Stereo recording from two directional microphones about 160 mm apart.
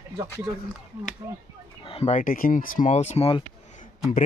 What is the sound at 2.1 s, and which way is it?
Speech, 55° left (ahead or behind).